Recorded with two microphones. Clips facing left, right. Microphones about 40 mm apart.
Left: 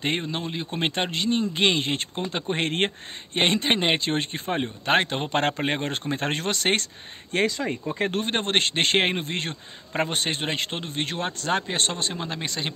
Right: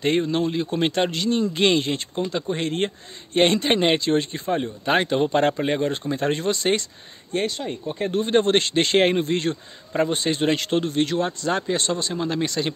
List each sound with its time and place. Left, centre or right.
0.0 s speech: centre
1.9 s speech: left
3.3 s a man's voice: centre
4.0 s speech: left
7.3 s speech: left
8.3 s speech: left
10.4 s speech: left
12.1 s a man's voice: centre